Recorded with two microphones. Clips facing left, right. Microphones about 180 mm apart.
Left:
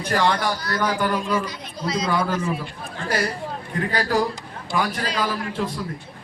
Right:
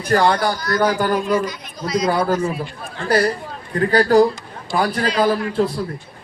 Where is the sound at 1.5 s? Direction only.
25° left (ahead or behind).